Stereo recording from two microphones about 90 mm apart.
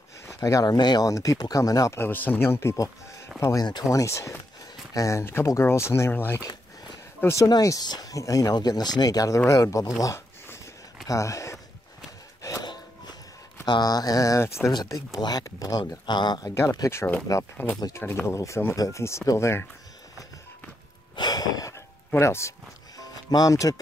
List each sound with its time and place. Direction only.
0.3 s speech: 35° left (ahead or behind)
0.7 s speech: 50° left (ahead or behind)
2.0 s speech: 20° left (ahead or behind)
7.4 s speech: 45° left (ahead or behind)
12.4 s music: 35° left (ahead or behind)
12.6 s a sound: 50° left (ahead or behind)
13.7 s speech: 50° left (ahead or behind); by 14.7 s 30° left (ahead or behind)
14.7 s speech: 50° left (ahead or behind)
16.9 s speech: 20° left (ahead or behind)
18.2 s speech: 35° left (ahead or behind)
21.2 s a sound: 50° left (ahead or behind)
22.2 s speech: 30° left (ahead or behind)
22.9 s music: 45° left (ahead or behind)